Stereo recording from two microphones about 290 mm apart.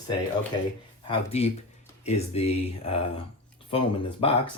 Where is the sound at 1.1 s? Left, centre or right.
Left.